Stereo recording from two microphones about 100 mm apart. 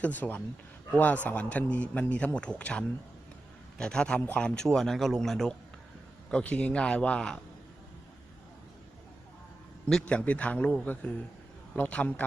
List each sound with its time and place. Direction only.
0.0 s a man's voice: 15° left (ahead or behind)
9.9 s a man's voice: 15° left (ahead or behind)